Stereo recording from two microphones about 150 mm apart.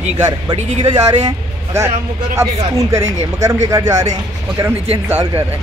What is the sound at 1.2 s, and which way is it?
Vehicle, 20° right (ahead or behind).